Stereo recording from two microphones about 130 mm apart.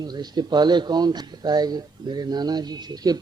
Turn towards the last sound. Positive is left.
turn(degrees=-30)  # may be behind; listen again after turning